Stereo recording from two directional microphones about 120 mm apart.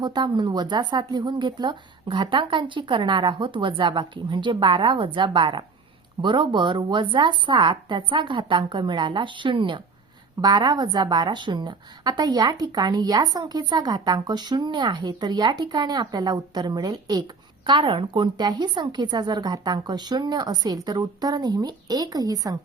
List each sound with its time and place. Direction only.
0.0 s a woman's voice: 40° right (ahead or behind)